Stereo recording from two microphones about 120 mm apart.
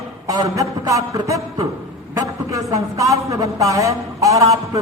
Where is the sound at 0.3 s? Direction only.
30° right (ahead or behind).